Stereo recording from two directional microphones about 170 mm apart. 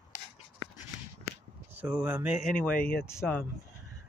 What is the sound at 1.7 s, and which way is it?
Speech, 10° right (ahead or behind).